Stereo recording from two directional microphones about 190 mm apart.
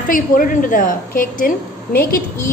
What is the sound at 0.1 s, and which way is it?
A woman's voice, 45° left (ahead or behind).